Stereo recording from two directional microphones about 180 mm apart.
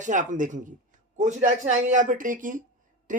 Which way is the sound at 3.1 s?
45° right (ahead or behind).